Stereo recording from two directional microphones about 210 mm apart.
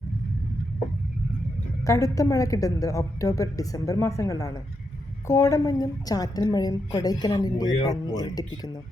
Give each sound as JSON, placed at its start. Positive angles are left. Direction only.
{"t": 1.8, "sound": "a woman's voice", "side_deg": 15}